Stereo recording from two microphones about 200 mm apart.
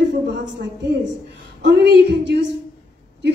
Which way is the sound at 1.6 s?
60° right (ahead or behind).